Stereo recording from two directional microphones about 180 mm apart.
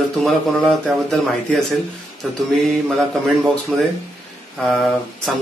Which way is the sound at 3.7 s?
5° left (ahead or behind).